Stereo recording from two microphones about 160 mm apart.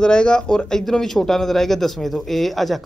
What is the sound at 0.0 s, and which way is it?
Speech, 5° left (ahead or behind).